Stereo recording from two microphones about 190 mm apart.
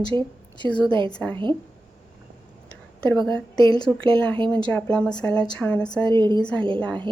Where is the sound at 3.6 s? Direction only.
20° left (ahead or behind).